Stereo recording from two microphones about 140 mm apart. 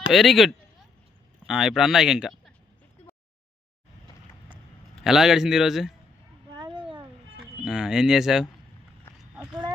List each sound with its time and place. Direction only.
0.1 s speech: centre (ahead or behind)
5.0 s speech: 5° right (ahead or behind)
6.6 s a sound: 35° right (ahead or behind)
7.6 s speech: 5° right (ahead or behind)